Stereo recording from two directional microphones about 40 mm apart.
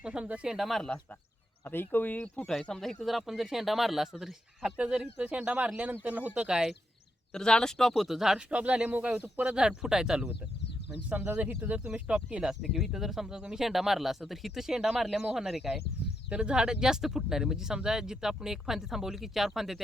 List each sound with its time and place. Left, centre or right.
0.0 s speech: right
0.6 s speech: centre
1.7 s speech: left
2.5 s speech: centre
4.6 s speech: right
6.5 s speech: centre
7.3 s speech: centre
7.9 s speech: centre
8.4 s speech: right
11.1 s speech: right
12.4 s speech: centre
13.3 s speech: centre
13.7 s speech: centre
16.3 s speech: right; by 19.8 s centre